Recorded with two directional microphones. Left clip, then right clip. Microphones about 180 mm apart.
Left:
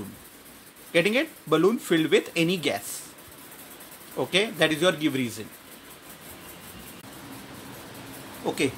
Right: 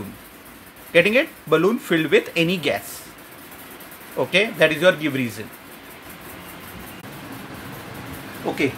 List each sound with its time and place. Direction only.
0.9 s speech: 15° left (ahead or behind)
4.2 s speech: 15° left (ahead or behind)
8.5 s speech: 30° left (ahead or behind)